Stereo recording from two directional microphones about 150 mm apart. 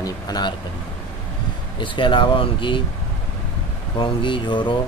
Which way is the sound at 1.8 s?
35° left (ahead or behind).